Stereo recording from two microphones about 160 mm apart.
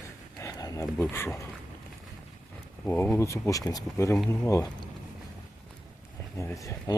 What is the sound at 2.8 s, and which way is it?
Speech, 15° left (ahead or behind).